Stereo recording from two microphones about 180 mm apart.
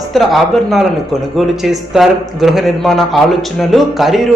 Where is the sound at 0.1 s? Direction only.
Centre (ahead or behind).